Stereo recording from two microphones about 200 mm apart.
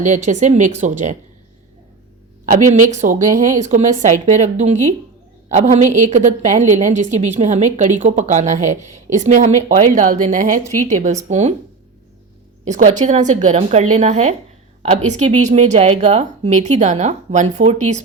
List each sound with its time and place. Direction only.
0.0 s a woman's voice: 40° right (ahead or behind)
2.5 s a woman's voice: 40° right (ahead or behind)
12.6 s a woman's voice: 35° right (ahead or behind)